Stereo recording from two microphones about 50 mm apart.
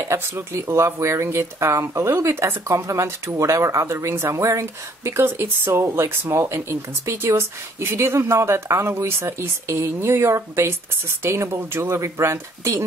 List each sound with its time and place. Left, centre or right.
0.1 s speech: right
4.1 s a woman's voice: right